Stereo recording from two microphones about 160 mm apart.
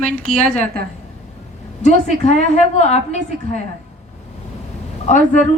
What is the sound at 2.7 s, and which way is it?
Speech, 45° left (ahead or behind).